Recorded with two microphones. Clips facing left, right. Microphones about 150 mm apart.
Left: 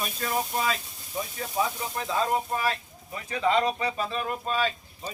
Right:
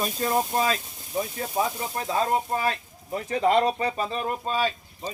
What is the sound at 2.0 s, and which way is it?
Speech, 35° right (ahead or behind).